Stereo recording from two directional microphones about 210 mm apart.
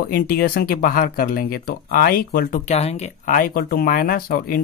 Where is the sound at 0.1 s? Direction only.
45° left (ahead or behind).